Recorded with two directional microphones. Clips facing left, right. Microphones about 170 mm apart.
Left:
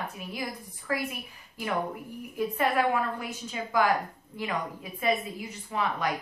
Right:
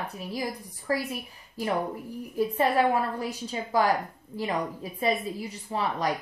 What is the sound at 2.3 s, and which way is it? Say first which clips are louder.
Speech: right 3 dB; 30° right (ahead or behind).